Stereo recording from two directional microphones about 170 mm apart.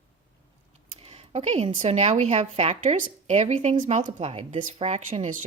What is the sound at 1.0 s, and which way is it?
A woman's voice, 40° right (ahead or behind).